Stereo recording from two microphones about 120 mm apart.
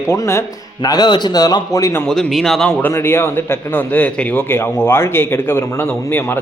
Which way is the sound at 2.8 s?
20° left (ahead or behind).